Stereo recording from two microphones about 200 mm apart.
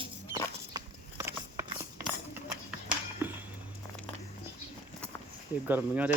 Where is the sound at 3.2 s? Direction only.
10° right (ahead or behind).